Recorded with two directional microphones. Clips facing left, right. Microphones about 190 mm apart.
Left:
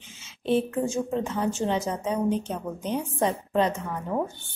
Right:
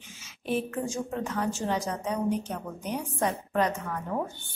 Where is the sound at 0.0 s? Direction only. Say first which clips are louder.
Left 6 dB; 25° left (ahead or behind).